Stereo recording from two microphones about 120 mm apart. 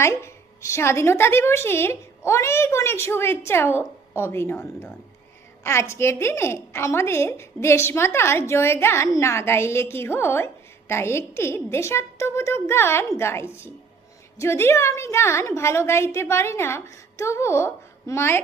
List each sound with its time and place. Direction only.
0.0 s a woman's voice: 25° left (ahead or behind)
5.6 s a woman's voice: 25° left (ahead or behind)